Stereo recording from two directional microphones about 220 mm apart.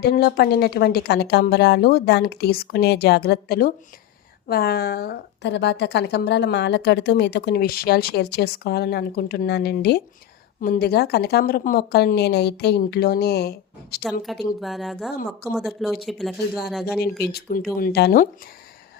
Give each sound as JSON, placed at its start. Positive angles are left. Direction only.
{"t": 0.0, "sound": "a woman's voice", "side_deg": 45}
{"t": 14.3, "sound": "speech", "side_deg": 0}
{"t": 17.0, "sound": "a woman's voice", "side_deg": 45}